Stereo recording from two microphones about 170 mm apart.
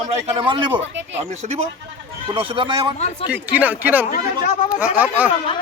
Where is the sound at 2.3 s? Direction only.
30° right (ahead or behind).